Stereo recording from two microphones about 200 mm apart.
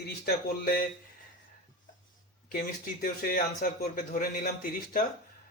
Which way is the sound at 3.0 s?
45° left (ahead or behind).